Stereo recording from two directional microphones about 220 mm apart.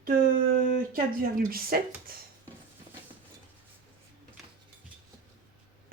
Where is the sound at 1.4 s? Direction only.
40° right (ahead or behind).